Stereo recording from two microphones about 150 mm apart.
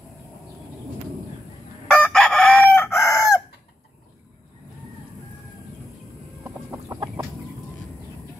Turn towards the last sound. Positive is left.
turn(degrees=-20)  # may be behind; listen again after turning